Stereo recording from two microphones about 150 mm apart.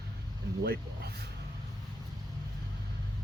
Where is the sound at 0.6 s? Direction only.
90° right.